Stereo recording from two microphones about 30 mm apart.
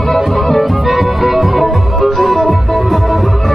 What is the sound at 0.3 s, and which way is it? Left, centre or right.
Music, centre.